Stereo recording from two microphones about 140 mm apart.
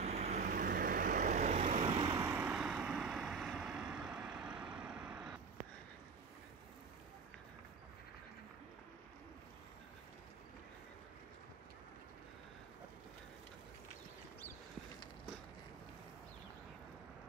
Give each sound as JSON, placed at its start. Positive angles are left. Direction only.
{"t": 0.0, "sound": "vehicle", "side_deg": -50}
{"t": 1.9, "sound": "vehicle", "side_deg": -30}